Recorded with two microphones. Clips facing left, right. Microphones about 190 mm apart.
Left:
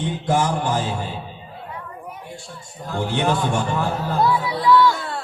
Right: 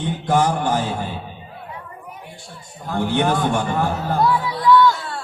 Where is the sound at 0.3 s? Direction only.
55° right (ahead or behind).